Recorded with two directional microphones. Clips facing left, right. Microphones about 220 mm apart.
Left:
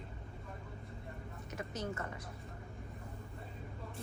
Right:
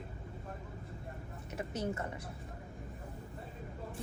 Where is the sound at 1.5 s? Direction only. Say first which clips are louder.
Right 4 dB; 30° right (ahead or behind).